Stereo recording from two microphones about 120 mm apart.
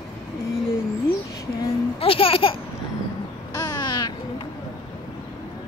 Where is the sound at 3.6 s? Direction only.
35° left (ahead or behind).